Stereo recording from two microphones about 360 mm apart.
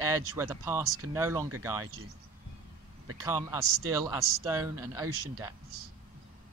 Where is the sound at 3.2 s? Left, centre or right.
Centre.